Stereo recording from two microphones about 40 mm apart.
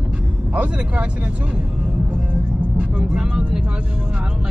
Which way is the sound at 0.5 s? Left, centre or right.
Right.